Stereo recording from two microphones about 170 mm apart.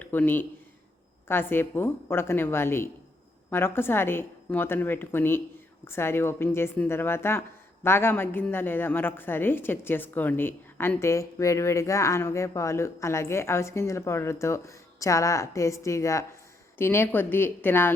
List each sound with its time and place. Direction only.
0.0 s a woman's voice: 10° left (ahead or behind)